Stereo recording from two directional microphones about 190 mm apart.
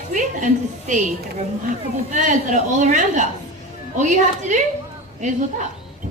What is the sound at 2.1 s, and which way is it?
A woman's voice, 40° right (ahead or behind).